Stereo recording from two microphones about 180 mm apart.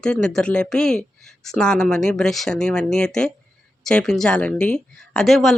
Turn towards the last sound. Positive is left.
turn(degrees=0)  # may be behind; listen again after turning